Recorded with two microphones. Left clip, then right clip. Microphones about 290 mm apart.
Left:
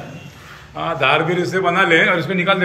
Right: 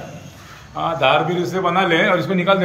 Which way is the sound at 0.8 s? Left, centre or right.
Centre.